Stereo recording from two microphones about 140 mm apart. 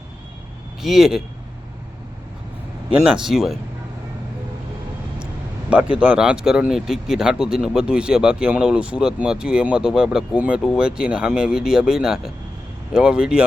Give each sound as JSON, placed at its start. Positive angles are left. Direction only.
{"t": 0.8, "sound": "speech", "side_deg": -5}
{"t": 2.9, "sound": "speech", "side_deg": -10}
{"t": 6.0, "sound": "speech", "side_deg": -10}